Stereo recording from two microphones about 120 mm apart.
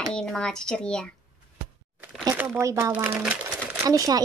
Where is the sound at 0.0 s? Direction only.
5° left (ahead or behind).